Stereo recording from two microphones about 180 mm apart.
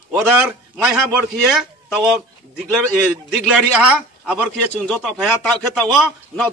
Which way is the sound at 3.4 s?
5° right (ahead or behind).